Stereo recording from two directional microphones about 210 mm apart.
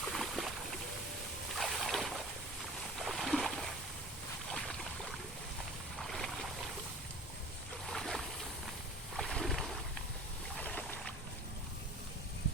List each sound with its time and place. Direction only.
0.1 s boat: centre (ahead or behind)
1.5 s boat: centre (ahead or behind)
6.0 s boat: centre (ahead or behind)
7.9 s a sound: centre (ahead or behind)
10.6 s boat: 5° left (ahead or behind)